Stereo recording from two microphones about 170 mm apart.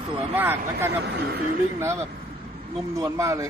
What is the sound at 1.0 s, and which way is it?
Speech, 70° right (ahead or behind).